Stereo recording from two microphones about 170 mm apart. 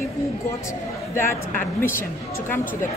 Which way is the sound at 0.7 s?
15° left (ahead or behind).